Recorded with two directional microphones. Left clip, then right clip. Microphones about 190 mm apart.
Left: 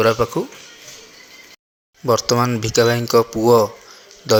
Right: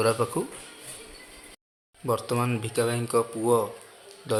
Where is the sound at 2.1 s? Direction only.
30° left (ahead or behind).